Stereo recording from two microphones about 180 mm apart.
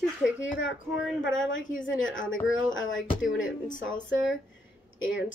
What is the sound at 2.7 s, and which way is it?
Speech, 90° left.